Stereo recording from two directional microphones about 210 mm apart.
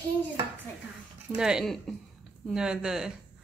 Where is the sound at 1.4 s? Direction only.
5° right (ahead or behind).